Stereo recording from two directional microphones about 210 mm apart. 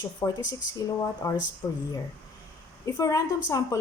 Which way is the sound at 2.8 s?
15° left (ahead or behind).